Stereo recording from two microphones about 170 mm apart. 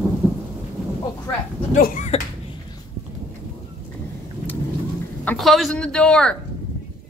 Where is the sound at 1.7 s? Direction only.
50° left (ahead or behind).